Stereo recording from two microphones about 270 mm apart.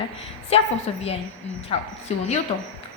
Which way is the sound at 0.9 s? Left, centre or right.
Left.